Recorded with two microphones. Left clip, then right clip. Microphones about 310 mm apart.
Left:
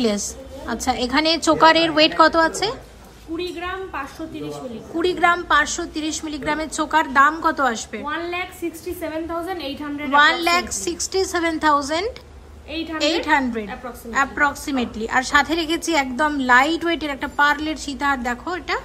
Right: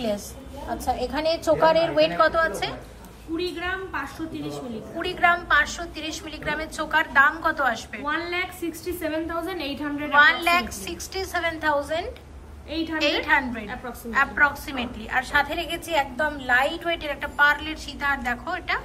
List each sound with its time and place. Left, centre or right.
0.7 s a woman's voice: left
3.3 s a woman's voice: centre
4.9 s a woman's voice: centre